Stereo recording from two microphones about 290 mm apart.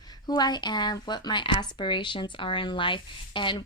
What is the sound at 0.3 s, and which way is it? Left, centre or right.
A woman's voice, centre.